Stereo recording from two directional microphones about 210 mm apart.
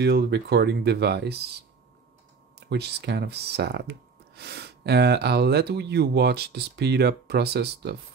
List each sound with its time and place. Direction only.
0.0 s speech: 50° right (ahead or behind)
2.7 s speech: 55° right (ahead or behind)